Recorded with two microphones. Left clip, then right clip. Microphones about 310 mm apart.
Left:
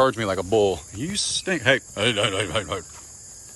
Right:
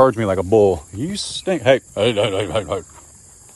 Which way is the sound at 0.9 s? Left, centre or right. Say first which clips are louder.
Even; centre.